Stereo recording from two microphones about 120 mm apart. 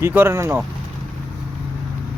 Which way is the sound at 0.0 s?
20° right (ahead or behind).